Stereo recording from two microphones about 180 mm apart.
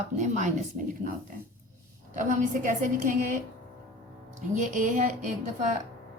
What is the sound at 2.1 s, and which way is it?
A woman's voice, 45° right (ahead or behind).